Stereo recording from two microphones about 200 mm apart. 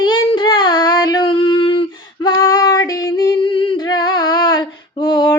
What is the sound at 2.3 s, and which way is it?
Female singing, 15° left (ahead or behind).